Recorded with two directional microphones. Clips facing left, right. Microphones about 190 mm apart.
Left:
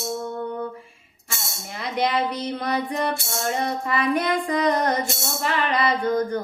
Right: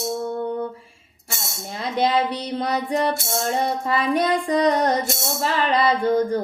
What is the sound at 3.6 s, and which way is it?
Female singing, 30° right (ahead or behind).